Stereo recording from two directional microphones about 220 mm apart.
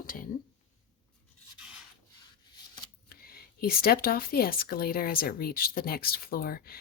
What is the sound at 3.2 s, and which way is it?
Speech, 45° left (ahead or behind).